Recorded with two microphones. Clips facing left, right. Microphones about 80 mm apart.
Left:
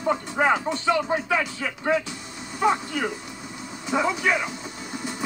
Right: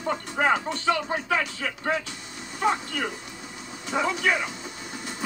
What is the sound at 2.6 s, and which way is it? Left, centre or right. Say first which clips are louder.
Speech: left 3 dB; centre.